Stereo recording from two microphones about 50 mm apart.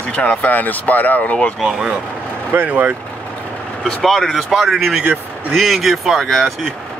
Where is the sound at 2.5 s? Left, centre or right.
Right.